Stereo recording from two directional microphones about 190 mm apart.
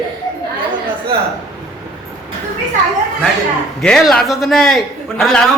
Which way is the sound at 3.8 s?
Centre (ahead or behind).